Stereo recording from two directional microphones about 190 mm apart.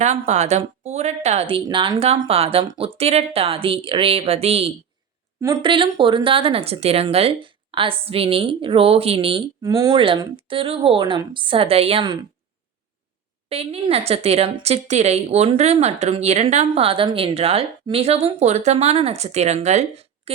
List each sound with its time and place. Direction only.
0.0 s a woman's voice: 35° right (ahead or behind)
5.4 s speech: 20° right (ahead or behind)
13.5 s a woman's voice: 30° right (ahead or behind)